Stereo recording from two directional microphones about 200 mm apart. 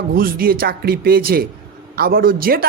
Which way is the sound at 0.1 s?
50° right (ahead or behind).